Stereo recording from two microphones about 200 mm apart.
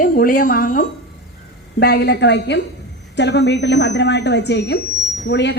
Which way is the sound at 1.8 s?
55° left (ahead or behind).